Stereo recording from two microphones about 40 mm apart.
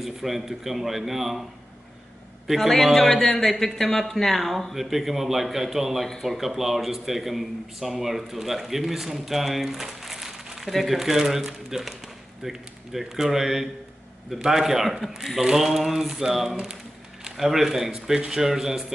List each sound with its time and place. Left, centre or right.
0.0 s speech: centre
2.4 s speech: centre